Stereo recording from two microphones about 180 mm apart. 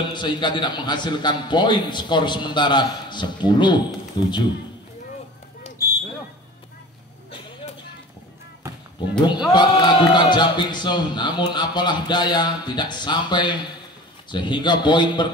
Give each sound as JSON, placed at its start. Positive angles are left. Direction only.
{"t": 0.0, "sound": "a man's voice", "side_deg": 25}
{"t": 9.5, "sound": "a man's voice", "side_deg": 25}